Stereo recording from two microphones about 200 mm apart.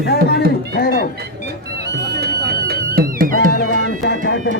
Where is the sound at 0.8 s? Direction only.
50° left (ahead or behind).